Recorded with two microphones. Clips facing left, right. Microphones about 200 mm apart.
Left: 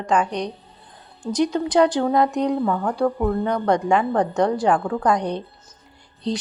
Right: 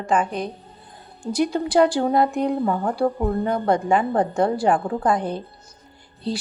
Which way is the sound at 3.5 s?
5° right (ahead or behind).